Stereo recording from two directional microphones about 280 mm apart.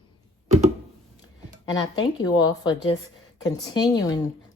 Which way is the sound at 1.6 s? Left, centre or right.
Centre.